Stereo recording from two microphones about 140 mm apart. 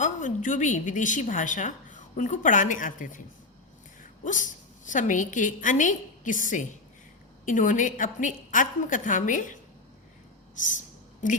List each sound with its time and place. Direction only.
0.0 s a woman's voice: 60° left (ahead or behind)
4.2 s a woman's voice: 65° left (ahead or behind)
10.6 s a sound: 65° left (ahead or behind)